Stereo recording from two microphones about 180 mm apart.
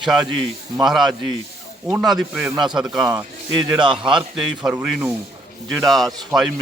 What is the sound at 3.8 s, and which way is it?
Speech, 25° right (ahead or behind).